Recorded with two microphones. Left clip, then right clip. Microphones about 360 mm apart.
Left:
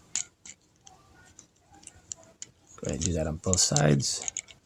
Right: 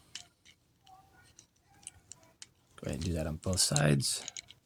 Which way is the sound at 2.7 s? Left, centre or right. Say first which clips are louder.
Left 6 dB; right.